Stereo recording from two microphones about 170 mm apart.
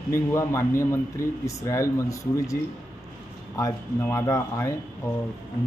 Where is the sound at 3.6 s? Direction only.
15° left (ahead or behind).